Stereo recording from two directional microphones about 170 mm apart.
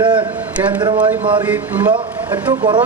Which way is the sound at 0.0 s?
30° right (ahead or behind).